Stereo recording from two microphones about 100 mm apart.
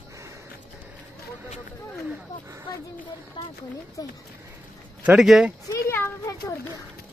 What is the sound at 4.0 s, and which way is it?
Speech, 40° left (ahead or behind).